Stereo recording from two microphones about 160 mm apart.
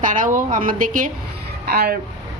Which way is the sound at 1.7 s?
80° right.